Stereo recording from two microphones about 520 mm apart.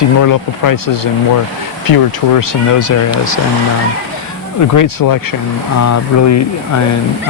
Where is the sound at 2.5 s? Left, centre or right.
Left.